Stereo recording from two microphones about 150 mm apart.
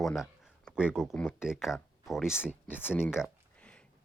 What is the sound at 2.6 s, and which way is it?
Speech, 15° left (ahead or behind).